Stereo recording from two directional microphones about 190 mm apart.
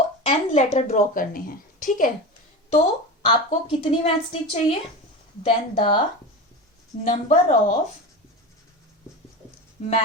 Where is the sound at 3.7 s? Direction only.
30° left (ahead or behind).